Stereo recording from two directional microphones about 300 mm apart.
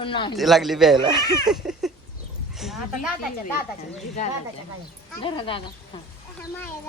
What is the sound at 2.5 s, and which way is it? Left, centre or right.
Speech, centre.